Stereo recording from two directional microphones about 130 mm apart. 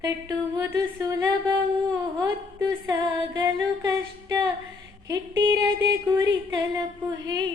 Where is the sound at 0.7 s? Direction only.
30° right (ahead or behind).